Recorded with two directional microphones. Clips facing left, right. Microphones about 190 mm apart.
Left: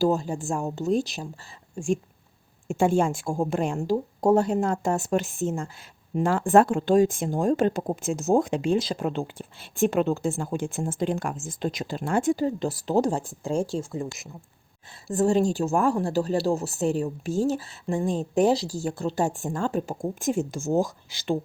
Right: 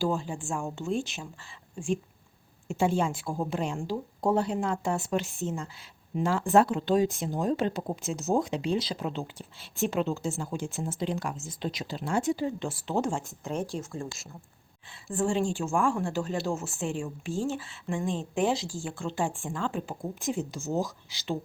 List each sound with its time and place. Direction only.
0.0 s speech: 40° left (ahead or behind); by 14.3 s 20° left (ahead or behind)
15.0 s speech: 40° left (ahead or behind)